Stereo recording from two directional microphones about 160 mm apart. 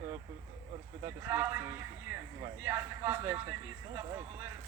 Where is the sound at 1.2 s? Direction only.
15° right (ahead or behind).